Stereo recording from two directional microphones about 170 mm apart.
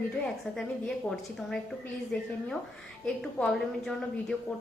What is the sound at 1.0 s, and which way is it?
A woman's voice, centre (ahead or behind).